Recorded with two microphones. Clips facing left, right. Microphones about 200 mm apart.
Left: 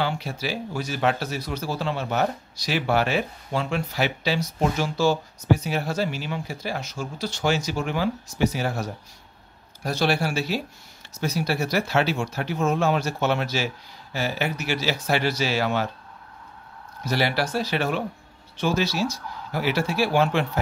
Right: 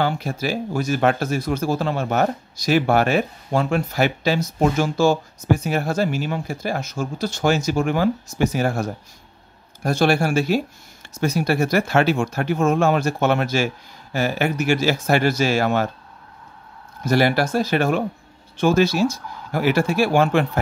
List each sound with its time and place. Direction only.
0.0 s a man's voice: 45° right (ahead or behind)
17.0 s a man's voice: 50° right (ahead or behind)